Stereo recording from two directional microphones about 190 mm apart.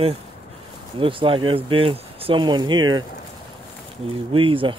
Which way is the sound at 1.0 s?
25° right (ahead or behind).